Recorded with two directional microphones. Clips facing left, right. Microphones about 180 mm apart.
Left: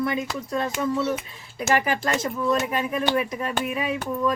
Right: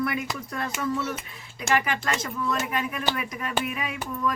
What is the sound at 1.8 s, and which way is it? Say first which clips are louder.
Speech: left 3 dB; 35° left (ahead or behind).